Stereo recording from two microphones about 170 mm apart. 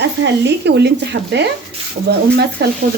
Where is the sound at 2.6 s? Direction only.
70° right (ahead or behind).